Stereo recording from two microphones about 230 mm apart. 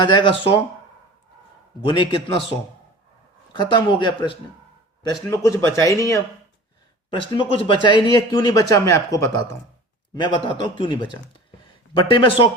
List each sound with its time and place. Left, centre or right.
0.0 s speech: centre
1.9 s speech: left
3.5 s speech: centre
5.3 s speech: centre